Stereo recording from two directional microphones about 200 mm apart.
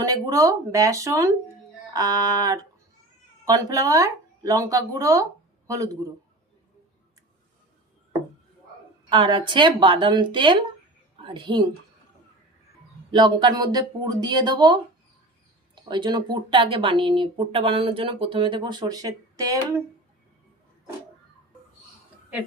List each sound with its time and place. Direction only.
0.0 s a man's voice: 20° right (ahead or behind)
9.0 s a woman's voice: 25° right (ahead or behind)
13.1 s speech: 20° right (ahead or behind)